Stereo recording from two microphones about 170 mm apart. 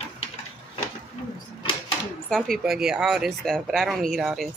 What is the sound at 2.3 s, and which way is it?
Speech, centre (ahead or behind).